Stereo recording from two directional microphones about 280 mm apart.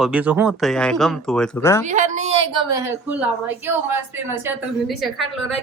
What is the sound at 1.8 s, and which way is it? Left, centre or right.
Speech, right.